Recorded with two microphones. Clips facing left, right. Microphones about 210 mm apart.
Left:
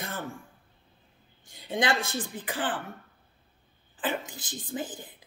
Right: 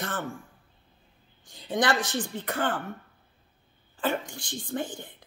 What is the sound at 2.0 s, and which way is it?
Speech, 5° left (ahead or behind).